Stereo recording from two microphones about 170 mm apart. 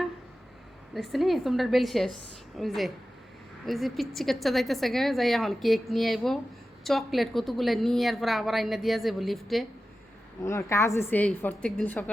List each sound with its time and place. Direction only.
0.9 s a woman's voice: centre (ahead or behind)
10.4 s a woman's voice: 15° left (ahead or behind)